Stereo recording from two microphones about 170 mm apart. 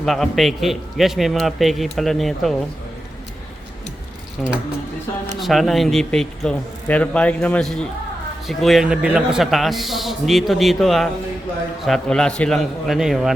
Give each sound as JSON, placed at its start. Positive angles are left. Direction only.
{"t": 0.0, "sound": "speech", "side_deg": 0}
{"t": 4.4, "sound": "speech", "side_deg": 5}